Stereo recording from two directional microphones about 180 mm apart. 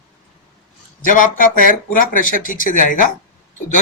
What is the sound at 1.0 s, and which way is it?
A man's voice, 45° left (ahead or behind).